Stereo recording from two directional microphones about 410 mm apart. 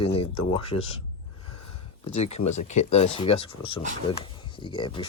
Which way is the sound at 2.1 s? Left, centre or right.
Centre.